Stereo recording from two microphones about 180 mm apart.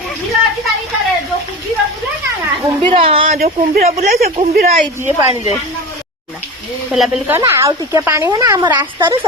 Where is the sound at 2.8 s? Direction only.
30° right (ahead or behind).